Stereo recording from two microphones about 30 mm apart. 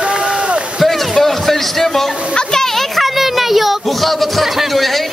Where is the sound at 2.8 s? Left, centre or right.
Centre.